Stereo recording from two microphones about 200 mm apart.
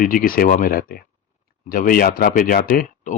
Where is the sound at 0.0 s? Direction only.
45° left (ahead or behind).